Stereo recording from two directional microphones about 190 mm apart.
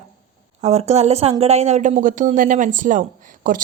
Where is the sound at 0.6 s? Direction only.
35° right (ahead or behind).